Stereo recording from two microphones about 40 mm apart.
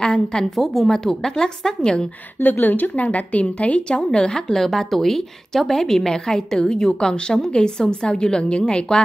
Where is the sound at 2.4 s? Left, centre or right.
Left.